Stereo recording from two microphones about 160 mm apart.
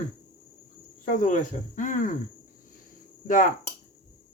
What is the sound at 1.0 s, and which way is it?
Speech, 55° left (ahead or behind).